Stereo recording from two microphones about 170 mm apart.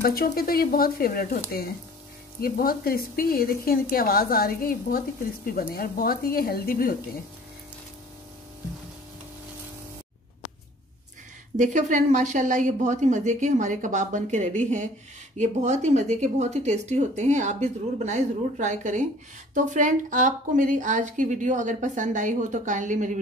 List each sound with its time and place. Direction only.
0.0 s a woman's voice: 65° left (ahead or behind)
2.4 s a woman's voice: 60° left (ahead or behind)
11.5 s speech: 45° right (ahead or behind)